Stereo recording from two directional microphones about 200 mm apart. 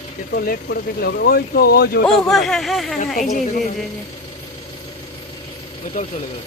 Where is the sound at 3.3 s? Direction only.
40° left (ahead or behind).